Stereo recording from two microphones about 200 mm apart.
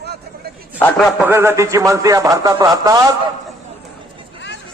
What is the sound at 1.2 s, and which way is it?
Speech, 10° right (ahead or behind).